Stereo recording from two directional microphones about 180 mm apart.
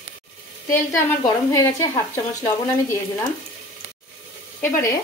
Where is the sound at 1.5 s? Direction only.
20° left (ahead or behind).